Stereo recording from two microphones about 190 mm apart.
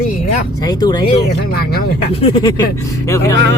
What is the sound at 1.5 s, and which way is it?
Speech, 55° left (ahead or behind).